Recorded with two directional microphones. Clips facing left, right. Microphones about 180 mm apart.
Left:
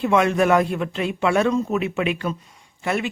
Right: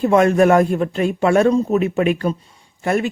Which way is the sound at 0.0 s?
45° right (ahead or behind).